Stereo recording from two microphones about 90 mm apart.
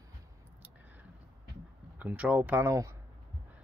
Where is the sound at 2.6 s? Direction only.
35° right (ahead or behind).